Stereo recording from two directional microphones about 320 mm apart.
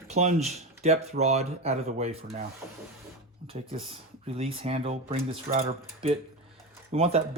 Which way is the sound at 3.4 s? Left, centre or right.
Centre.